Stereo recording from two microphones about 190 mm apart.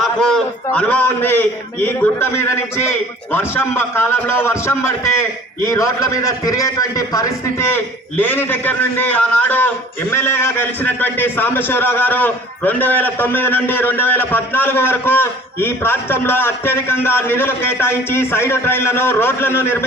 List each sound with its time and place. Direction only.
0.0 s a man's voice: 5° left (ahead or behind)